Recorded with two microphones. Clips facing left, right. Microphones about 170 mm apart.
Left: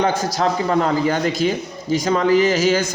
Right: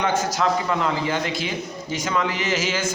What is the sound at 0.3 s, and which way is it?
A man's voice, 40° left (ahead or behind).